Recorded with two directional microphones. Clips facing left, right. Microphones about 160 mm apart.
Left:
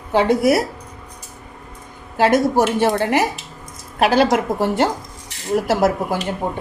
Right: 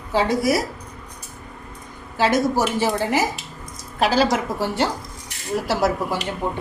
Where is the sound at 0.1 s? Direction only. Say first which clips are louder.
Left 4 dB; 60° left (ahead or behind).